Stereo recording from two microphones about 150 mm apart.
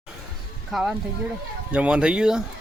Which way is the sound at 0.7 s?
Centre (ahead or behind).